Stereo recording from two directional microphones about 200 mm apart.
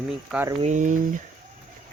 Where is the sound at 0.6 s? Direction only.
40° right (ahead or behind).